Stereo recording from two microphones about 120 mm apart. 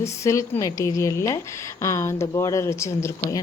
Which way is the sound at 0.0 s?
25° left (ahead or behind).